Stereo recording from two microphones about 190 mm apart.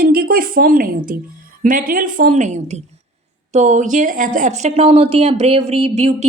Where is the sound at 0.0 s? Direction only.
50° right (ahead or behind).